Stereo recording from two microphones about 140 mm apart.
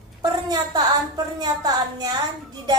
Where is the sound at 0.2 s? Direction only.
30° right (ahead or behind).